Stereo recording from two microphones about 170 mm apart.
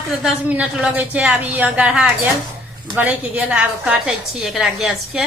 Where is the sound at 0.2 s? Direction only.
5° right (ahead or behind).